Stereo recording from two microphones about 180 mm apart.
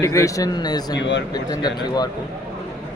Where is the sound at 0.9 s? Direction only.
80° left.